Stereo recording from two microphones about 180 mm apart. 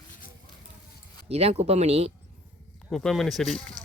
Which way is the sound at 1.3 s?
35° right (ahead or behind).